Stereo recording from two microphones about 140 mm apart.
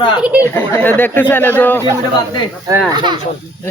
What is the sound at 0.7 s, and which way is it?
Speech, 15° left (ahead or behind).